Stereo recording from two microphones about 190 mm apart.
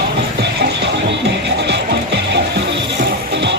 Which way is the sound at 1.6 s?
65° right (ahead or behind).